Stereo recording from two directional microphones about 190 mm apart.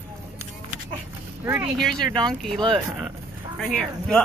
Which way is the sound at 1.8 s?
Centre (ahead or behind).